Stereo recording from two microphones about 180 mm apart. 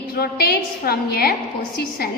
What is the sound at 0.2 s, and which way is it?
A woman's voice, 60° left (ahead or behind).